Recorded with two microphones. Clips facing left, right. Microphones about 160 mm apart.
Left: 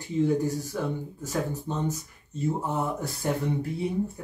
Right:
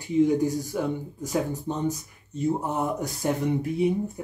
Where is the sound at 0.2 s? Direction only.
15° right (ahead or behind).